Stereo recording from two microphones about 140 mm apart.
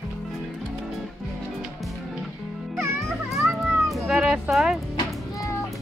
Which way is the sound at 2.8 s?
20° right (ahead or behind).